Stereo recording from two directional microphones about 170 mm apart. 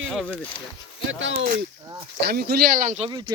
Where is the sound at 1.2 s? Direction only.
90° right.